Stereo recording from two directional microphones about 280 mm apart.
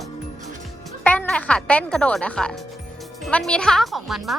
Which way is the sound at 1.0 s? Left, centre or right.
Centre.